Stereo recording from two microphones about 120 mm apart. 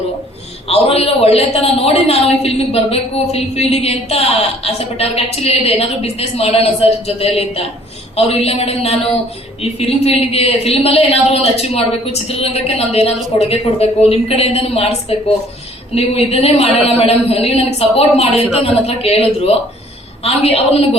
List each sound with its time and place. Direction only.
0.7 s a man's voice: 55° left (ahead or behind)
16.0 s a man's voice: 55° left (ahead or behind)